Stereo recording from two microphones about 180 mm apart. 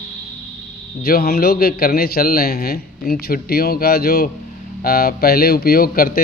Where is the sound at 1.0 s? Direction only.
60° left (ahead or behind).